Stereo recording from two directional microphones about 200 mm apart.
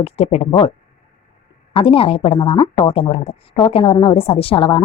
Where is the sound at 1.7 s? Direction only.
25° left (ahead or behind).